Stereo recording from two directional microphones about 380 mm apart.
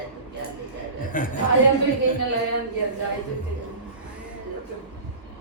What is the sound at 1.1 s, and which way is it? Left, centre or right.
Speech, left.